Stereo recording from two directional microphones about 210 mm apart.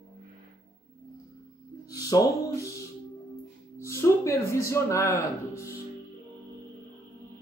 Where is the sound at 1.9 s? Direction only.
15° left (ahead or behind).